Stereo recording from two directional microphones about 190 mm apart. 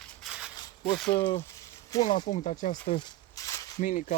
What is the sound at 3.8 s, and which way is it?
Speech, 40° left (ahead or behind).